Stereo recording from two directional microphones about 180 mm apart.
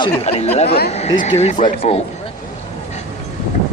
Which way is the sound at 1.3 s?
35° left (ahead or behind).